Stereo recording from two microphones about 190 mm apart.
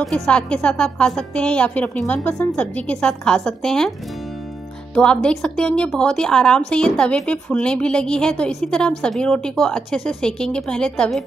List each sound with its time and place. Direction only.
0.0 s a woman's voice: 5° left (ahead or behind)
4.9 s a woman's voice: 5° left (ahead or behind)